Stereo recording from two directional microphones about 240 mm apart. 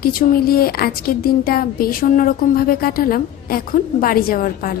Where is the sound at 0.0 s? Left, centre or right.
Left.